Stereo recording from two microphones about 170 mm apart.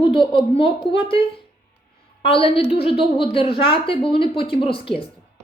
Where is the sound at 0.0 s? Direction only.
30° left (ahead or behind).